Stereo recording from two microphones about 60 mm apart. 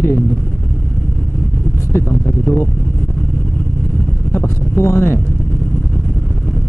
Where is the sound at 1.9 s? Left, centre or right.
Left.